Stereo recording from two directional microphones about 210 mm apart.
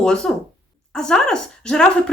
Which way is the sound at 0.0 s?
5° left (ahead or behind).